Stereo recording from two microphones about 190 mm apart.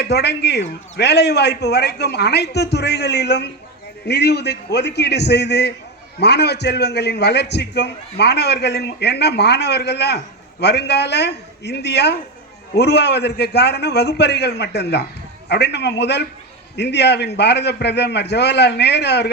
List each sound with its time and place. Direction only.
0.0 s a man's voice: 60° left (ahead or behind)